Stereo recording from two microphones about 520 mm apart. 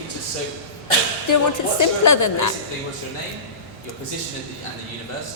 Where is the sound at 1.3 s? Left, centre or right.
Left.